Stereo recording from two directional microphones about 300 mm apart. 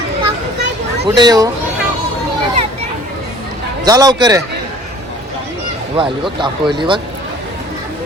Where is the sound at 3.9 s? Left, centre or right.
Centre.